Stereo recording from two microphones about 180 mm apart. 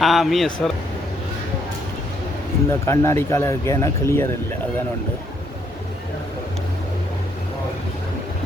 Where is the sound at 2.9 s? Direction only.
15° left (ahead or behind).